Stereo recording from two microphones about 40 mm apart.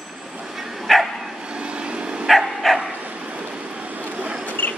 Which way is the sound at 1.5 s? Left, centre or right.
Right.